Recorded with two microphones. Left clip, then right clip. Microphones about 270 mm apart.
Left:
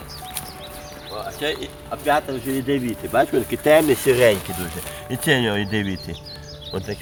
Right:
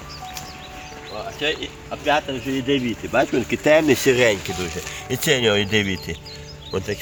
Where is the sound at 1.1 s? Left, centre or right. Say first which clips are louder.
Right 1 dB; centre.